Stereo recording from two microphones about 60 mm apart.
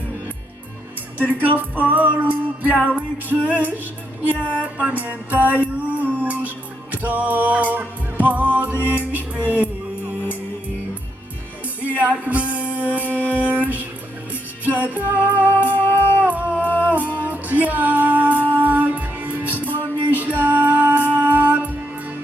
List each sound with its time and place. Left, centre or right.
1.2 s music: right
11.9 s music: right
13.0 s music: left
13.2 s music: right
15.6 s music: left
16.2 s music: right